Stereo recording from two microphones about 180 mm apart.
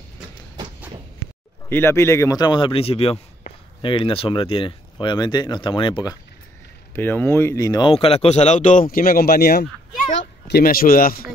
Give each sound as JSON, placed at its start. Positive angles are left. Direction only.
{"t": 1.7, "sound": "a man's voice", "side_deg": 15}
{"t": 7.0, "sound": "a man's voice", "side_deg": 10}